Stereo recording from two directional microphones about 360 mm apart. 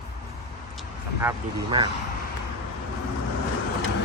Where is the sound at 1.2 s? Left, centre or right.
Centre.